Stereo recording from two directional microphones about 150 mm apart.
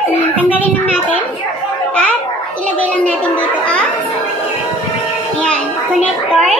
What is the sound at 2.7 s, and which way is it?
A child's voice, 10° left (ahead or behind).